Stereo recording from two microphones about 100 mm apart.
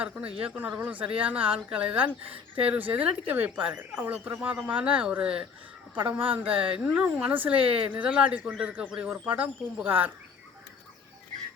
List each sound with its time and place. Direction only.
0.0 s speech: 15° right (ahead or behind)